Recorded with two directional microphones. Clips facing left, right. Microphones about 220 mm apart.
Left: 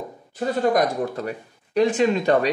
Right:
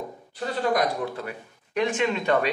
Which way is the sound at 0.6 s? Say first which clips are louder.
Left 4 dB; 45° left (ahead or behind).